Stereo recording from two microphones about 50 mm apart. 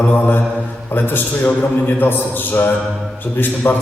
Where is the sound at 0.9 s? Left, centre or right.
Left.